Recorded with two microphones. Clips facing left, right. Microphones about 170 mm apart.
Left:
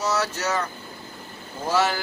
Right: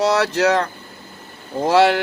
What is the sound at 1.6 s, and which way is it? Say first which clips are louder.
Speech: right 8 dB; 75° right (ahead or behind).